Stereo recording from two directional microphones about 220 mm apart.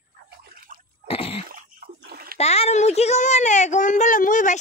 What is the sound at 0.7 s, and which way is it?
Sneeze, 40° right (ahead or behind).